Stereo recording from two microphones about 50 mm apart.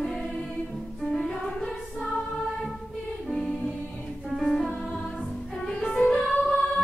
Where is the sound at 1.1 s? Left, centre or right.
Centre.